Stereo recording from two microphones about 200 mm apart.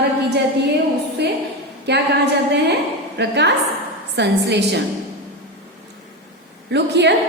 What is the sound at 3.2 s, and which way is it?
A woman's voice, 60° right (ahead or behind).